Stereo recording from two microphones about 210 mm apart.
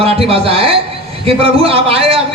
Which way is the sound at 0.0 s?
30° right (ahead or behind).